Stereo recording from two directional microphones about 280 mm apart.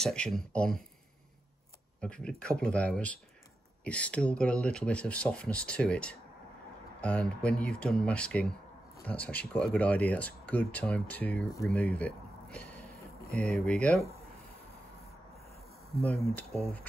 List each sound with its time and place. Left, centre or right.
0.0 s speech: centre
2.0 s speech: centre
13.0 s a sound: left
13.6 s speech: centre
16.3 s speech: centre